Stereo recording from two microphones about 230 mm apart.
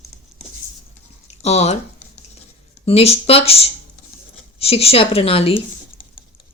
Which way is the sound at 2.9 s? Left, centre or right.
Left.